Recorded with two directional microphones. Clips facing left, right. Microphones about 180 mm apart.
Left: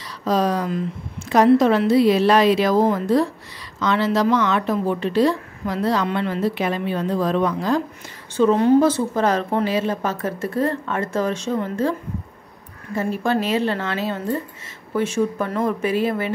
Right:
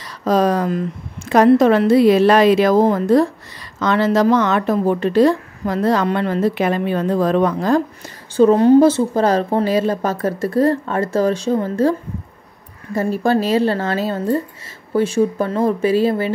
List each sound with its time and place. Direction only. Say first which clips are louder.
0.2 s a woman's voice: right 4 dB; 50° right (ahead or behind)
8.4 s a woman's voice: right 5 dB; 35° right (ahead or behind)
12.9 s a woman's voice: right 4 dB; 40° right (ahead or behind)